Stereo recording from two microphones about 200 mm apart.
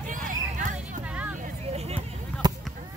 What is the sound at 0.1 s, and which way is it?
Hubbub, 40° right (ahead or behind).